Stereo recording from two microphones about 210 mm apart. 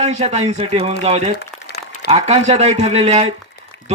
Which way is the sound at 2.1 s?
30° right (ahead or behind).